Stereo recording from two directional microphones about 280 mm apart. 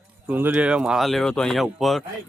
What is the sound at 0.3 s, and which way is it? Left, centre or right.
Speech, centre.